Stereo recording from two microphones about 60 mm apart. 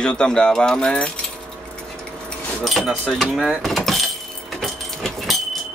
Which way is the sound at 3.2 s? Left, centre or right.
Centre.